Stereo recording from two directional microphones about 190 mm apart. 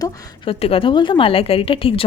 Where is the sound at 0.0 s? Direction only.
30° left (ahead or behind).